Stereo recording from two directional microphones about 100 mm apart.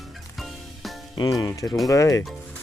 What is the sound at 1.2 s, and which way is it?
Music, 35° left (ahead or behind).